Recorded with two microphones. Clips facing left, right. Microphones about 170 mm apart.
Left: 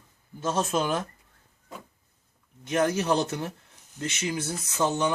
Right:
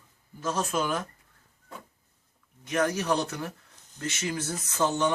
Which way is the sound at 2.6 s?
25° left (ahead or behind).